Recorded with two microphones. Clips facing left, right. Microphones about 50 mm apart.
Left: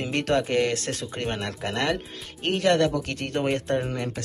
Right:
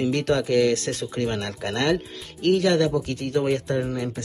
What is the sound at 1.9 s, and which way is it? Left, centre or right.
Speech, left.